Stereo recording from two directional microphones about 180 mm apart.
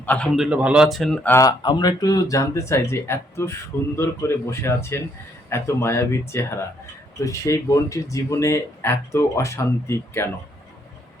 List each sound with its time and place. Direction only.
0.0 s speech: 10° left (ahead or behind)
0.3 s speech: 5° right (ahead or behind); by 10.2 s 15° left (ahead or behind)